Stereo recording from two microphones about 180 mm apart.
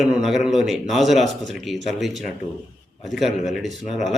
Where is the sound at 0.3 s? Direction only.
Centre (ahead or behind).